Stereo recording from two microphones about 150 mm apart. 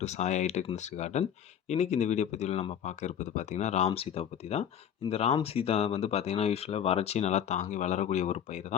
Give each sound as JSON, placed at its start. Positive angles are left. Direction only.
{"t": 0.0, "sound": "speech", "side_deg": 50}